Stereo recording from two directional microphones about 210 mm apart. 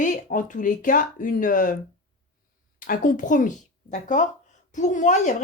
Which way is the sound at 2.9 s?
40° left (ahead or behind).